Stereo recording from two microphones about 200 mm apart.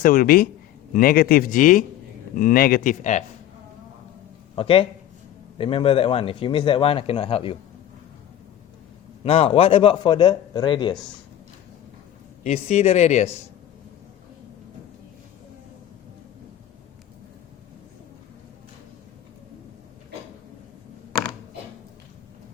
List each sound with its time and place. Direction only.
0.0 s speech: 45° left (ahead or behind)
4.5 s speech: 25° left (ahead or behind)
9.2 s speech: 30° left (ahead or behind)
12.4 s speech: 35° left (ahead or behind)